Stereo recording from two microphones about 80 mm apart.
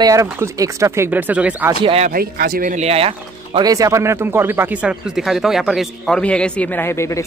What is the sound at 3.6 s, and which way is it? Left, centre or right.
Speech, right.